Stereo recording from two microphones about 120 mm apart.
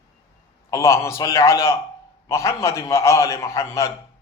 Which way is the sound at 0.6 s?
25° left (ahead or behind).